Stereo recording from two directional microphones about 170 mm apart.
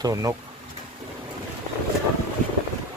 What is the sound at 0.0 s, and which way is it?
Speech, 20° right (ahead or behind).